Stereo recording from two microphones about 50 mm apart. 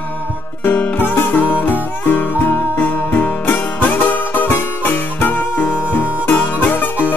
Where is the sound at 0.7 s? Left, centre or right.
Left.